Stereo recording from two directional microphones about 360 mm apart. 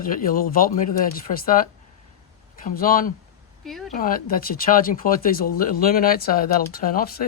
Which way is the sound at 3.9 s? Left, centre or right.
Left.